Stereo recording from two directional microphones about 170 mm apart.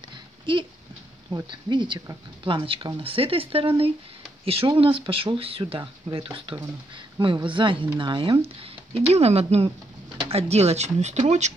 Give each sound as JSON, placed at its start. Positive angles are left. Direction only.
{"t": 0.5, "sound": "speech", "side_deg": -30}